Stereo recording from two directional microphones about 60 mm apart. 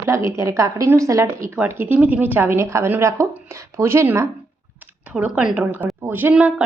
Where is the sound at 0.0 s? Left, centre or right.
Right.